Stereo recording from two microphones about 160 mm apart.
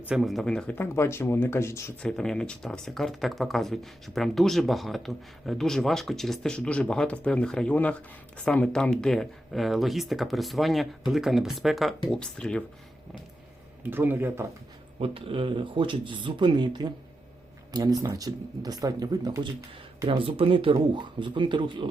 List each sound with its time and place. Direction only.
0.1 s speech: centre (ahead or behind); by 2.0 s 15° left (ahead or behind)
2.0 s speech: 5° left (ahead or behind)
13.8 s speech: 10° right (ahead or behind)
14.9 s speech: 35° right (ahead or behind)
18.0 s speech: 20° right (ahead or behind)